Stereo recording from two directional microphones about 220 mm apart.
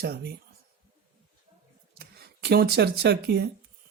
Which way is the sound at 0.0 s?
45° right (ahead or behind).